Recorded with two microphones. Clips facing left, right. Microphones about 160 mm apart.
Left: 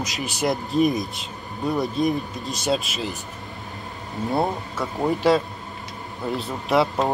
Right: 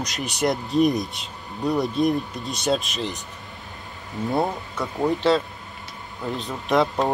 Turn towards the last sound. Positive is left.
turn(degrees=0)  # may be behind; listen again after turning